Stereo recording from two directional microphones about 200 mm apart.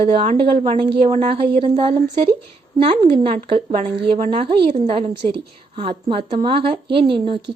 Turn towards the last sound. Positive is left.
turn(degrees=-25)  # may be behind; listen again after turning